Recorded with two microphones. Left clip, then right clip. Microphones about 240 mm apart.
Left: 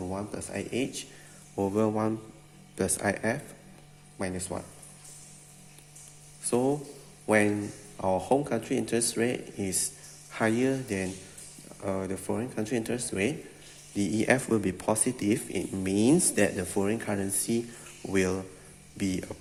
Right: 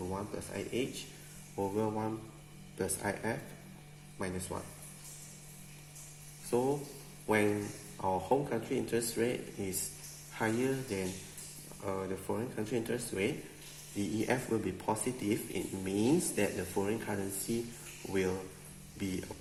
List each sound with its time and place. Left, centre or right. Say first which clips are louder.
0.1 s speech: left 4 dB; left
6.5 s speech: left 5 dB; left
8.0 s speech: left 5 dB; left